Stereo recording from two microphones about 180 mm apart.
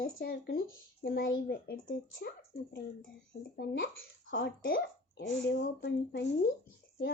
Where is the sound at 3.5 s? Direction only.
55° left (ahead or behind).